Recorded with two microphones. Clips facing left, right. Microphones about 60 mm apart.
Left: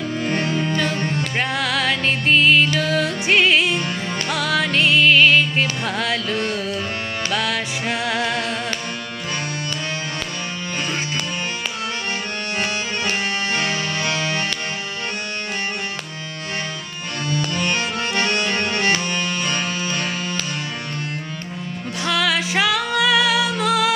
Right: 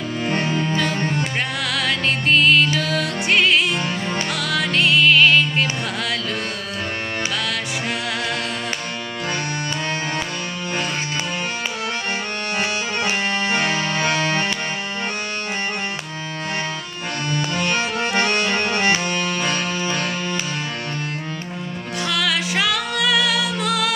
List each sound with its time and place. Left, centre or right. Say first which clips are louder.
1.6 s music: even; centre
7.3 s music: left 2 dB; centre
13.1 s accordion: right 1 dB; centre
18.0 s accordion: right 2 dB; centre
19.5 s music: right 1 dB; centre
19.8 s music: right 1 dB; right
22.0 s music: left 2 dB; centre